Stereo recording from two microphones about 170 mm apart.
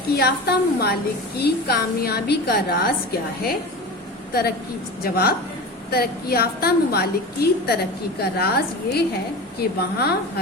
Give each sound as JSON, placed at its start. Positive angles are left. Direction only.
{"t": 0.2, "sound": "a woman's voice", "side_deg": 70}